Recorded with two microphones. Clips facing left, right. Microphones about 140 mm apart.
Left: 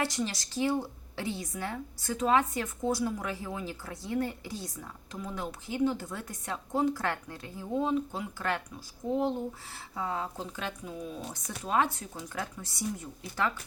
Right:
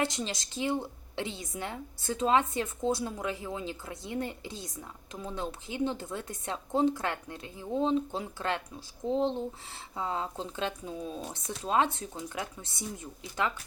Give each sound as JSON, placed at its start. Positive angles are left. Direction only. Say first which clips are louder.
{"t": 0.0, "sound": "speech", "louder": "even", "side_deg": -20}